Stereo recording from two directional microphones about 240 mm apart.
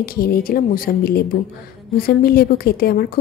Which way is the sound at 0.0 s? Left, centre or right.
Left.